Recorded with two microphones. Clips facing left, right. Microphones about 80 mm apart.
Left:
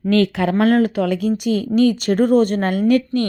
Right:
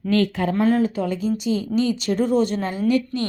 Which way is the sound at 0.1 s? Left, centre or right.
Left.